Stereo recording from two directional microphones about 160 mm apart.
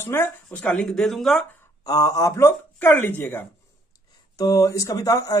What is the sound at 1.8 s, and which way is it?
Speech, 20° left (ahead or behind).